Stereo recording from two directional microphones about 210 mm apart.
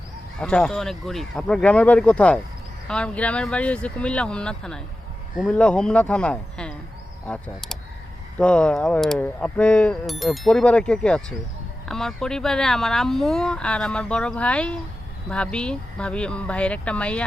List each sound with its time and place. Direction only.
0.3 s speech: 5° left (ahead or behind)